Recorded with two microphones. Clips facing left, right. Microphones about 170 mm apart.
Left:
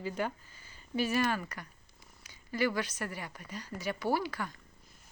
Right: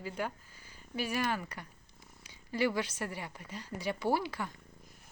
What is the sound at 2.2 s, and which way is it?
Purr, 30° right (ahead or behind).